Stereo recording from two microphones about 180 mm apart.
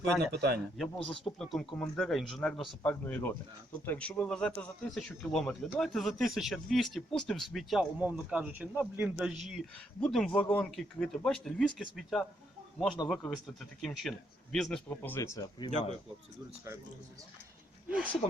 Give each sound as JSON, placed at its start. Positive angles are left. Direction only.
{"t": 0.3, "sound": "a man's voice", "side_deg": -65}
{"t": 1.0, "sound": "speech", "side_deg": 5}
{"t": 17.8, "sound": "a sound", "side_deg": -10}